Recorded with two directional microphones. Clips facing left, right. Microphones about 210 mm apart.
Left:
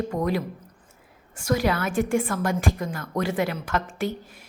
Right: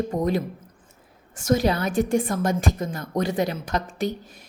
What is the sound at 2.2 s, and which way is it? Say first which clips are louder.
A woman's voice: right 1 dB; 20° right (ahead or behind).